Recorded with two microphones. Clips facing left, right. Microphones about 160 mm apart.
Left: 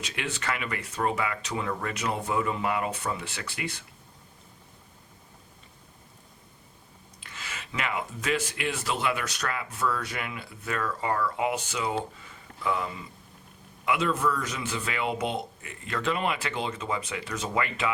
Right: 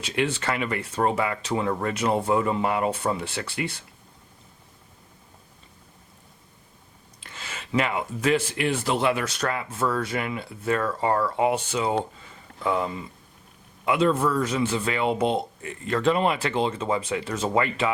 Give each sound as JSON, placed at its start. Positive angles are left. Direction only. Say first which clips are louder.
{"t": 0.0, "sound": "speech", "louder": "right 8 dB", "side_deg": -30}
{"t": 7.2, "sound": "speech", "louder": "right 2 dB", "side_deg": -30}